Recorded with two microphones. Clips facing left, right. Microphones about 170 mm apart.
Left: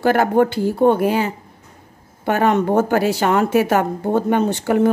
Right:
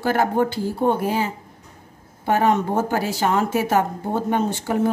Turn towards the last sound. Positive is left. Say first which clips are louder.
# left 5 dB
turn(degrees=70)  # may be behind; listen again after turning